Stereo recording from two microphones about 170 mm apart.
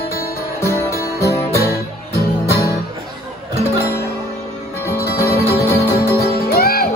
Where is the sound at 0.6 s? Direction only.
15° left (ahead or behind).